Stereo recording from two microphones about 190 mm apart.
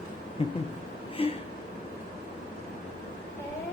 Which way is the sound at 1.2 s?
30° left (ahead or behind).